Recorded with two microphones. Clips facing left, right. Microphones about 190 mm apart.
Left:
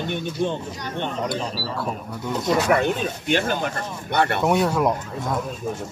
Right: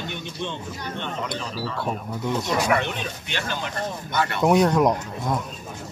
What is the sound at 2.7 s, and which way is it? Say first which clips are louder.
Speech: left 4 dB; 40° left (ahead or behind).